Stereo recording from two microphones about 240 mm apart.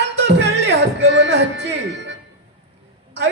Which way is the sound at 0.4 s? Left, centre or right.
Right.